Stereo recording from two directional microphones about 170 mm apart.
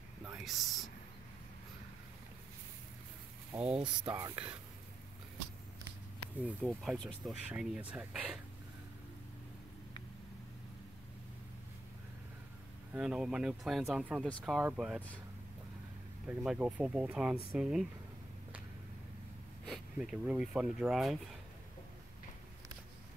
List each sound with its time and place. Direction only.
0.4 s a sound: centre (ahead or behind)
3.5 s speech: 5° right (ahead or behind)
6.6 s speech: centre (ahead or behind)
12.9 s speech: 5° right (ahead or behind)
16.3 s speech: 5° right (ahead or behind)
19.6 s speech: centre (ahead or behind)